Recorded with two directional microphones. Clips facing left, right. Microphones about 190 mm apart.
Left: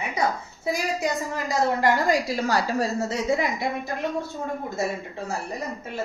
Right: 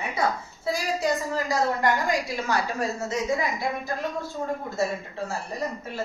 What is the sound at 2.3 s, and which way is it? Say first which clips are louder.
Speech: left 3 dB; 35° left (ahead or behind).